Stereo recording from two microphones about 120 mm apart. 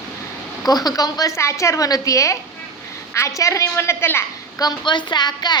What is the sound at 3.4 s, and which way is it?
Speech, 25° left (ahead or behind).